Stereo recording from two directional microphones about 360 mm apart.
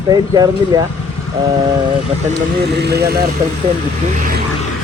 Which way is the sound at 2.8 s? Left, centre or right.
Right.